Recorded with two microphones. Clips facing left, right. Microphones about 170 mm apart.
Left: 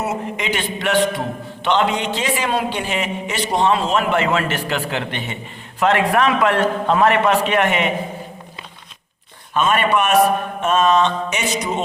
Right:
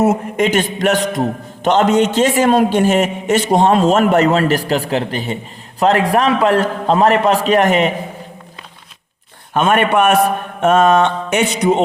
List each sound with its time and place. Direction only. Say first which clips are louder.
0.0 s a man's voice: right 9 dB; 45° right (ahead or behind)
9.6 s a man's voice: right 4 dB; 55° right (ahead or behind)
10.6 s mantra: right 5 dB; 55° right (ahead or behind)